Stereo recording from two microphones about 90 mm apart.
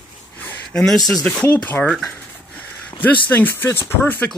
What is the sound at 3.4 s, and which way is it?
Speech, 25° left (ahead or behind).